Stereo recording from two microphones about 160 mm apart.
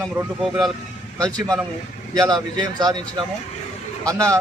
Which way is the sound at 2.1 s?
25° right (ahead or behind).